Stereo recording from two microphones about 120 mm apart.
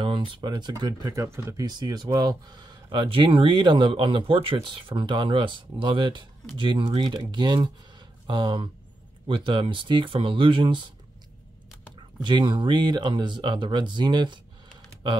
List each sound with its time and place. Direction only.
0.0 s speech: 45° right (ahead or behind); by 1.7 s 25° right (ahead or behind)
1.7 s speech: 35° right (ahead or behind)
12.2 s speech: 40° right (ahead or behind)